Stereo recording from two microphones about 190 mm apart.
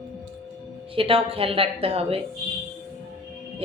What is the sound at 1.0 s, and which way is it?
Speech, 30° right (ahead or behind).